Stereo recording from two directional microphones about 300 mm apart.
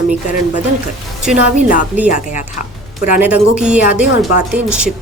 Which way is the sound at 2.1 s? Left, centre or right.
Left.